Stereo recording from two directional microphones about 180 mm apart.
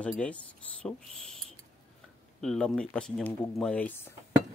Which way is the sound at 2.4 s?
5° left (ahead or behind).